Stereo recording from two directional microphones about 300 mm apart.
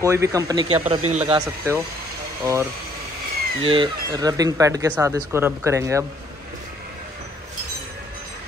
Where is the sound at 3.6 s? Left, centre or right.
Centre.